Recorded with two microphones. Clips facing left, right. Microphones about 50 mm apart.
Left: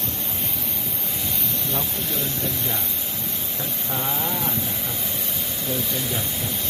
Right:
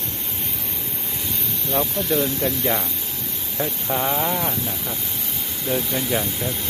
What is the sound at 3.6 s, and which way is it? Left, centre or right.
Speech, right.